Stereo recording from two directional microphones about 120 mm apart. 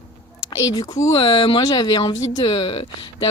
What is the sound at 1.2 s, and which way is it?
Speech, 45° left (ahead or behind).